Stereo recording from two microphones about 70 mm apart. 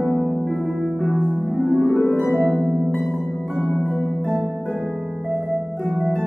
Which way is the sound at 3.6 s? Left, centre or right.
Left.